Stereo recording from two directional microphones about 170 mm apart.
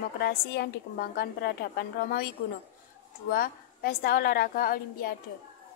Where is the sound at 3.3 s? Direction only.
60° left (ahead or behind).